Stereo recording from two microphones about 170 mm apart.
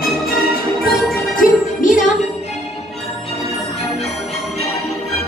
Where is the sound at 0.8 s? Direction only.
50° left (ahead or behind).